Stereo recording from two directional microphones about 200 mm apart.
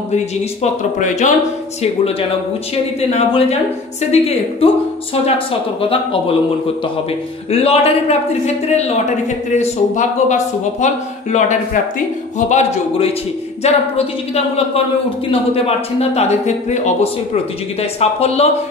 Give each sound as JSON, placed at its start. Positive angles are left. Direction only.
{"t": 0.9, "sound": "speech", "side_deg": 40}
{"t": 3.0, "sound": "speech", "side_deg": 30}
{"t": 5.8, "sound": "speech", "side_deg": 25}
{"t": 7.5, "sound": "speech", "side_deg": 30}
{"t": 15.5, "sound": "speech", "side_deg": 30}